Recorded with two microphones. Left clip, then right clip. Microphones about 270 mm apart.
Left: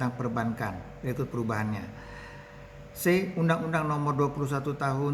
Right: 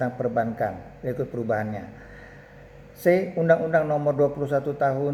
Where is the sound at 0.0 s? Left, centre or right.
Left.